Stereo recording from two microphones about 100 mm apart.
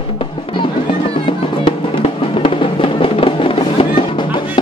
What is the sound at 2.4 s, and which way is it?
Music, 60° left (ahead or behind).